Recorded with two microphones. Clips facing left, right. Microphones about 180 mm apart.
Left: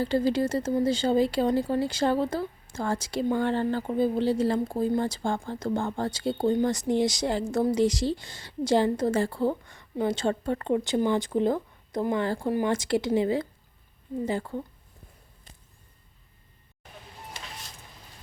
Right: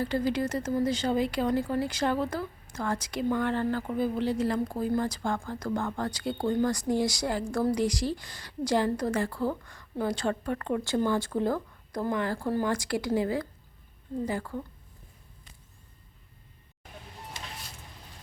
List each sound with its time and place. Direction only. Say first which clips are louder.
0.0 s speech: left 3 dB; 30° left (ahead or behind)
12.4 s speech: left 2 dB; 15° left (ahead or behind)